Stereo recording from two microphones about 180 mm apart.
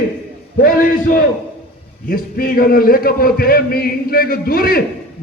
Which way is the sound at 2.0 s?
55° left (ahead or behind).